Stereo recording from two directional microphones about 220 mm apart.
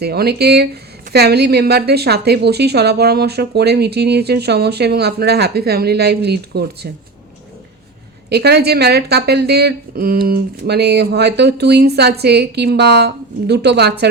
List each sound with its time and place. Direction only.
0.0 s a woman's voice: 45° right (ahead or behind)
8.3 s a woman's voice: 45° right (ahead or behind)